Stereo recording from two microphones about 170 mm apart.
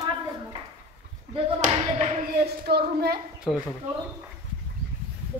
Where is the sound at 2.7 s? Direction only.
70° right (ahead or behind).